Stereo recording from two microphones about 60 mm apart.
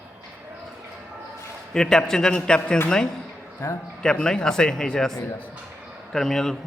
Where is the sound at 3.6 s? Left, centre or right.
Left.